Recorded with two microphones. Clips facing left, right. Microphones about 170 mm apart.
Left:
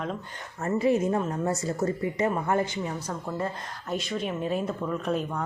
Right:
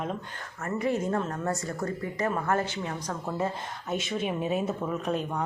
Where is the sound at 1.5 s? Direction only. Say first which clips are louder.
Left 4 dB; 20° left (ahead or behind); by 5.4 s centre (ahead or behind).